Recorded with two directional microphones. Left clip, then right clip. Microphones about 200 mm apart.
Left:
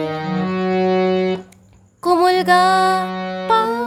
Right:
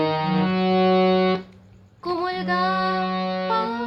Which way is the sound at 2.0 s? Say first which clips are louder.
Left 11 dB; 60° left (ahead or behind).